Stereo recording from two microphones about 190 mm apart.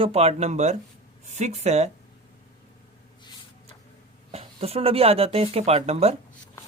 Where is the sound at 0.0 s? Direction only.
30° right (ahead or behind).